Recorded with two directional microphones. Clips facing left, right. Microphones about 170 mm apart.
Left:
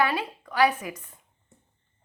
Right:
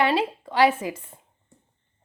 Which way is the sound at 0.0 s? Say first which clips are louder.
Right 4 dB; 25° right (ahead or behind).